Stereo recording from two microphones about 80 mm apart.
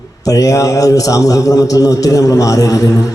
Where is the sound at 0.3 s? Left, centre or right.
Left.